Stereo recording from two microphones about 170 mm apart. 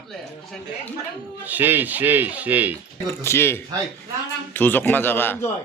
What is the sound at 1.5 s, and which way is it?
A man's voice, 10° right (ahead or behind).